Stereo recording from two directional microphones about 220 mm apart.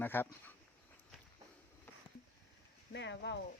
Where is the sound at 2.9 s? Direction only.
55° left (ahead or behind).